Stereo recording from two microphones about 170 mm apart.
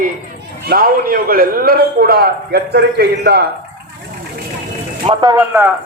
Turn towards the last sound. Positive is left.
turn(degrees=-15)  # may be behind; listen again after turning